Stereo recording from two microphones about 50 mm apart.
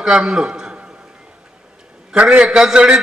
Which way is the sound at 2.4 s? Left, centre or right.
Centre.